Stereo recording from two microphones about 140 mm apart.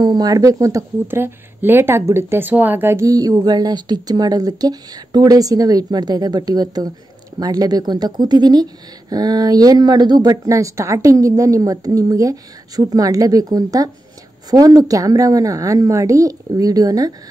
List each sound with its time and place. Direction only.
0.0 s speech: 30° right (ahead or behind)